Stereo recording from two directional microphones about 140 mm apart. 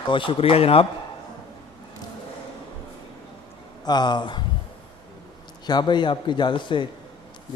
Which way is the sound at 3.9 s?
30° left (ahead or behind).